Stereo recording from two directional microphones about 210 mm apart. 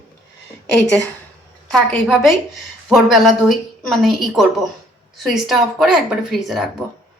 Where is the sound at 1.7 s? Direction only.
Centre (ahead or behind).